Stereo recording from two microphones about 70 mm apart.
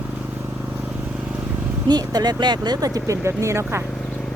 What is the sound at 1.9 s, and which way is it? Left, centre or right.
Speech, right.